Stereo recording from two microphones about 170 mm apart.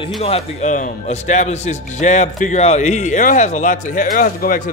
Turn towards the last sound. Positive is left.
turn(degrees=55)  # may be behind; listen again after turning